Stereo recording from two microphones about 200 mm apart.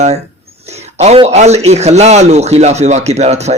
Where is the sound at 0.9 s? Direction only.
30° right (ahead or behind).